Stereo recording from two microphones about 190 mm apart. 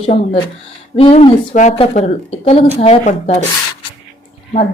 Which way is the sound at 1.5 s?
40° left (ahead or behind).